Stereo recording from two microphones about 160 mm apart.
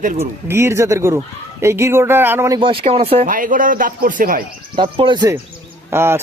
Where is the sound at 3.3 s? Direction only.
60° right (ahead or behind).